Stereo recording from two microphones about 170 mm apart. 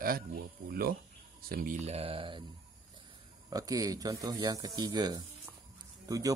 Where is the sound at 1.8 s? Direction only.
40° right (ahead or behind).